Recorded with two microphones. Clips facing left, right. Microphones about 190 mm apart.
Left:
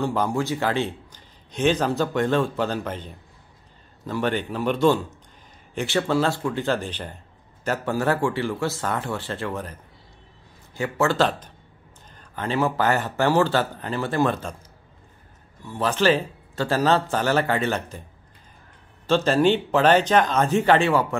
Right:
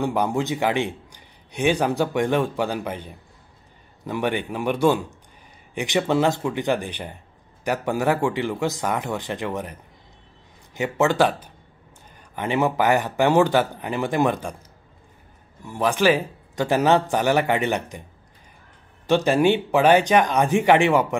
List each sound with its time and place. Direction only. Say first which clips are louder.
0.0 s a man's voice: right 1 dB; 15° right (ahead or behind)
15.6 s a man's voice: right 2 dB; 15° right (ahead or behind)
19.0 s a man's voice: right 1 dB; 15° right (ahead or behind)